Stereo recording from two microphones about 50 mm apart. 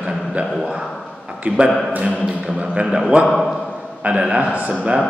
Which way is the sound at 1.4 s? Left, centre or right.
Right.